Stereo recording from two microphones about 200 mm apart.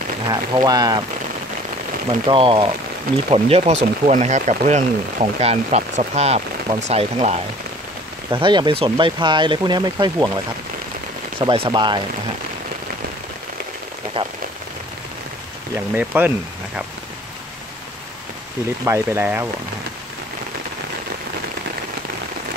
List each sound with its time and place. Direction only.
0.3 s speech: 20° right (ahead or behind)
2.2 s speech: 25° right (ahead or behind)
14.2 s speech: 25° right (ahead or behind)
15.7 s speech: 10° right (ahead or behind)
18.9 s speech: 10° right (ahead or behind)